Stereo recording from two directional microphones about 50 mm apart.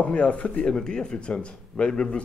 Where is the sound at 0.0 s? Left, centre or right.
Left.